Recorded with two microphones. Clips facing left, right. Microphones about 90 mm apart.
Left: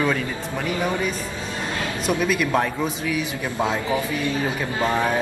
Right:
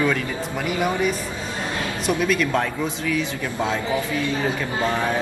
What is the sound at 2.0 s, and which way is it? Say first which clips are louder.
A man's voice: right 1 dB; 5° left (ahead or behind).